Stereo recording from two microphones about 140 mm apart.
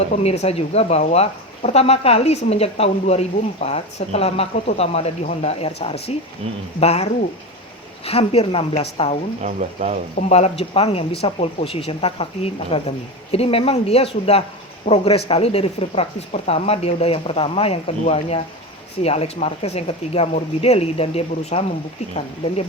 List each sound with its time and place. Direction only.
0.1 s speech: 50° left (ahead or behind)
9.4 s speech: 55° right (ahead or behind)
10.2 s speech: 50° left (ahead or behind)